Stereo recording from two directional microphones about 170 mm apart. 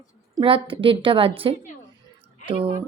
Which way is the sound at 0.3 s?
30° right (ahead or behind).